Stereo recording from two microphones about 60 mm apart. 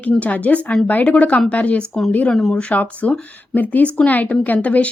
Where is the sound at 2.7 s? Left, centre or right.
Left.